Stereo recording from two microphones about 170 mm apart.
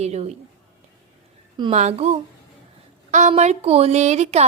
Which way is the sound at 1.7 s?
40° right (ahead or behind).